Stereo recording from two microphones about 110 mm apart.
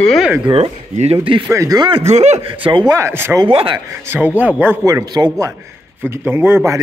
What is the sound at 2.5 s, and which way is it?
Speech, 50° right (ahead or behind).